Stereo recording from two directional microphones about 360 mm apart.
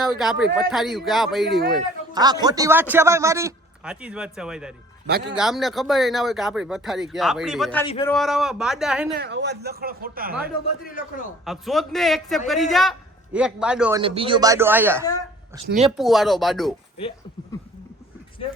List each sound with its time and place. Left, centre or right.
0.0 s speech: centre
2.1 s a man's voice: centre
5.0 s speech: right
5.3 s speech: centre
7.9 s a man's voice: centre
8.1 s speech: centre
9.1 s speech: right
10.8 s a man's voice: left
11.4 s speech: centre
14.0 s a man's voice: centre